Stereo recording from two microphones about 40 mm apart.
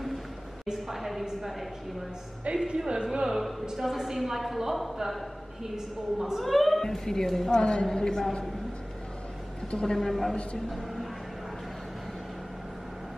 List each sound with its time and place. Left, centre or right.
0.7 s a woman's voice: centre
3.3 s a woman's voice: centre
6.1 s a woman's voice: centre
6.4 s a woman's voice: centre
7.5 s a man's voice: left
9.7 s a woman's voice: left
9.9 s a woman's voice: centre